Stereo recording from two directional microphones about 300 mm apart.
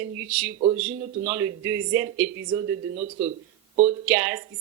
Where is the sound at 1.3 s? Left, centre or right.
Centre.